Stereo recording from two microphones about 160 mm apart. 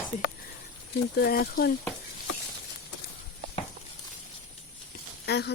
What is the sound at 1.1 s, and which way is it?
Speech, 75° left (ahead or behind).